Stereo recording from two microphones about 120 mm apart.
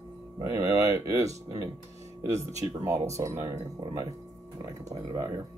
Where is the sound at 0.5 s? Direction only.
25° right (ahead or behind).